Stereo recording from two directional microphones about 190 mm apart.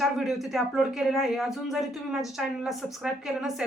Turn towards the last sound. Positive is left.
turn(degrees=0)  # may be behind; listen again after turning